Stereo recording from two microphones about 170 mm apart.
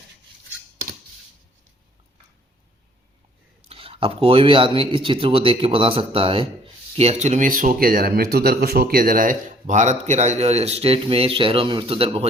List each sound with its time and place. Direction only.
3.7 s speech: 35° right (ahead or behind)